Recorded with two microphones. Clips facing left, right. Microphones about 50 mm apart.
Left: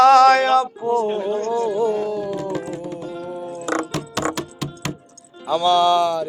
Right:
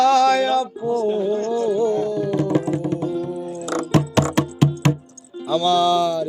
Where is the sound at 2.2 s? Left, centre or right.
Right.